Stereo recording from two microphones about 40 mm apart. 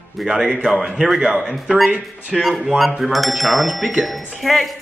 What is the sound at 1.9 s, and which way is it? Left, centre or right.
Speech, right.